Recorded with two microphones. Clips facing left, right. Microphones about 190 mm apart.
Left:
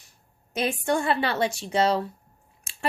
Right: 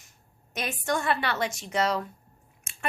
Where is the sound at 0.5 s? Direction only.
30° left (ahead or behind).